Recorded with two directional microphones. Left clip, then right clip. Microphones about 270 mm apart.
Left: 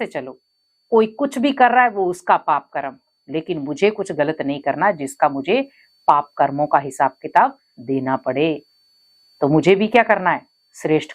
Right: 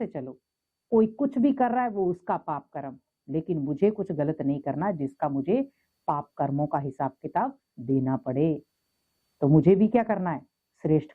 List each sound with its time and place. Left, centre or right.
0.0 s speech: centre